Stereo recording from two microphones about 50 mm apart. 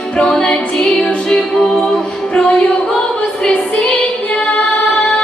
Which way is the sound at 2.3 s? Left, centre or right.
Centre.